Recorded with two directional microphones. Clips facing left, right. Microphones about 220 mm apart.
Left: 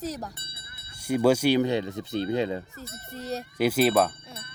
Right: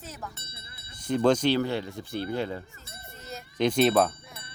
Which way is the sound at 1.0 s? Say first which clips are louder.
Left 1 dB; 10° left (ahead or behind).